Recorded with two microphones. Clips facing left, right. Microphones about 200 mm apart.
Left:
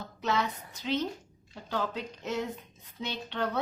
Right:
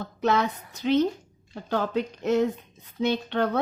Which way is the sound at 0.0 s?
55° right (ahead or behind).